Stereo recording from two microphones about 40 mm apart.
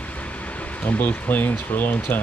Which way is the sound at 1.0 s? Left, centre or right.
Left.